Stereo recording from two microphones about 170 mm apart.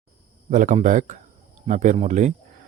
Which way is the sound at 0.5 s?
50° right (ahead or behind).